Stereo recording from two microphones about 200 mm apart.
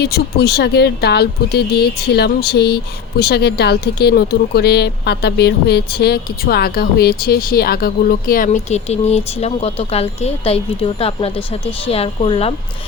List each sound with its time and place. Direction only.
0.0 s a woman's voice: 55° left (ahead or behind); by 12.5 s 30° left (ahead or behind)